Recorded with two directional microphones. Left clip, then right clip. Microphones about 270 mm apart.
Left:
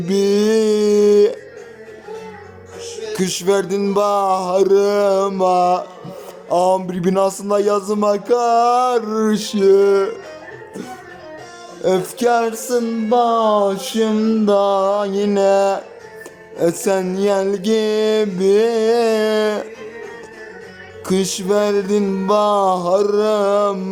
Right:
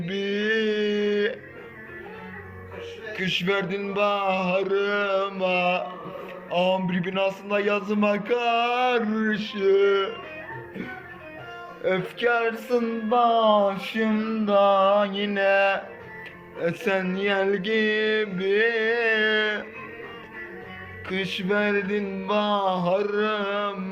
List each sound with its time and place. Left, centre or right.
0.1 s a sound: centre
3.2 s a man's voice: centre
11.8 s music: centre
21.1 s music: centre